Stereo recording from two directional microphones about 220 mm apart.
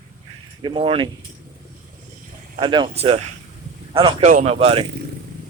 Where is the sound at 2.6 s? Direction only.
20° right (ahead or behind).